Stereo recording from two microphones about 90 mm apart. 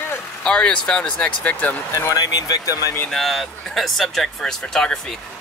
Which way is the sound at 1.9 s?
40° left (ahead or behind).